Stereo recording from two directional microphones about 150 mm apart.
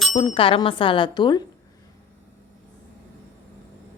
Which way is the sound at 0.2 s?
35° left (ahead or behind).